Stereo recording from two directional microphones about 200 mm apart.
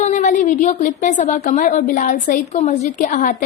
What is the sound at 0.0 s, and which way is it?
A woman's voice, 35° left (ahead or behind).